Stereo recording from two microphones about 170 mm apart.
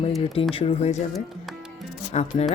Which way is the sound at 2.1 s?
40° left (ahead or behind).